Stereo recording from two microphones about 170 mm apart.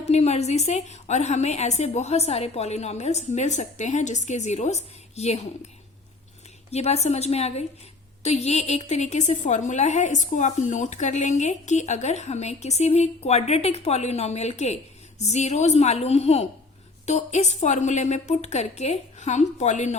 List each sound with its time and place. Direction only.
0.0 s a woman's voice: 40° left (ahead or behind)
6.7 s a woman's voice: 40° left (ahead or behind)